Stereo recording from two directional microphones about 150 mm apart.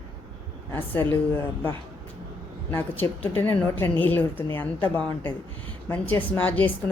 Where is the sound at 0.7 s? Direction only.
15° left (ahead or behind).